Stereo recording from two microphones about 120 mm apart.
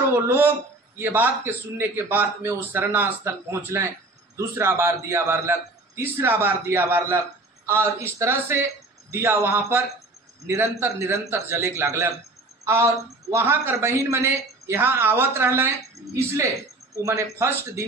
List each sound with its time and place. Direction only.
0.1 s a man's voice: 15° right (ahead or behind)
13.3 s speech: 15° right (ahead or behind)